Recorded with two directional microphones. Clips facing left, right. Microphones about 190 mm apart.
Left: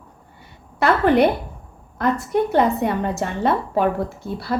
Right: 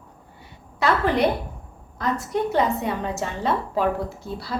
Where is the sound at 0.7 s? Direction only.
60° left (ahead or behind).